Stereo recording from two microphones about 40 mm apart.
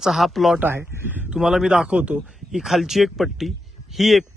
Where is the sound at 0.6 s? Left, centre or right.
Right.